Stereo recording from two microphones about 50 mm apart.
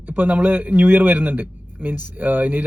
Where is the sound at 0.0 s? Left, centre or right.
Right.